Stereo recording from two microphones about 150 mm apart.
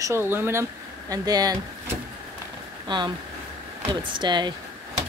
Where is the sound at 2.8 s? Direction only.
30° right (ahead or behind).